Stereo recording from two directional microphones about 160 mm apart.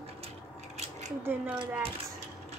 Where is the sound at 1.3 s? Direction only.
15° right (ahead or behind).